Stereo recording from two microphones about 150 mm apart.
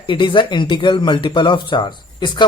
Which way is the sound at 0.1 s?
35° left (ahead or behind).